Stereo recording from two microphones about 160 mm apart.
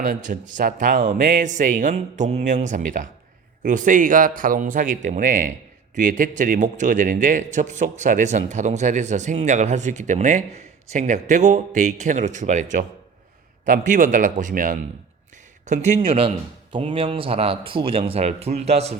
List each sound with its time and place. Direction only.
0.0 s a man's voice: 60° right (ahead or behind)
15.6 s speech: 50° right (ahead or behind)